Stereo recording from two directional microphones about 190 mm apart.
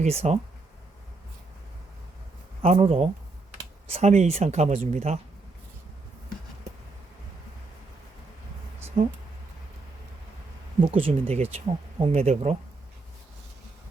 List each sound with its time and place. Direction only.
0.0 s speech: 35° right (ahead or behind)
2.6 s speech: 30° right (ahead or behind)
8.9 s speech: 35° right (ahead or behind)
10.8 s speech: 30° right (ahead or behind)